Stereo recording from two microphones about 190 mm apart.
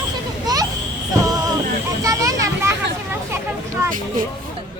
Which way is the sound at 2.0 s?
15° right (ahead or behind).